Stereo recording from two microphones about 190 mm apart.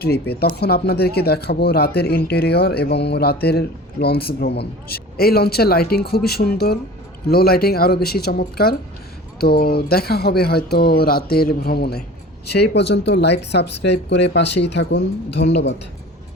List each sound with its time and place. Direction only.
0.0 s speech: 55° left (ahead or behind)